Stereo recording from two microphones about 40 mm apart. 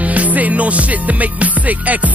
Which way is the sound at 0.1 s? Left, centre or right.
Right.